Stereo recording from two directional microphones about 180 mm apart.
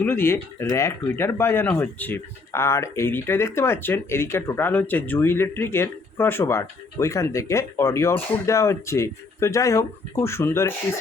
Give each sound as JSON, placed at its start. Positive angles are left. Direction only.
{"t": 0.0, "sound": "speech", "side_deg": 10}